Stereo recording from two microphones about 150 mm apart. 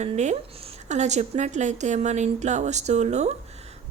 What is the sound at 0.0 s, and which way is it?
Speech, 50° right (ahead or behind).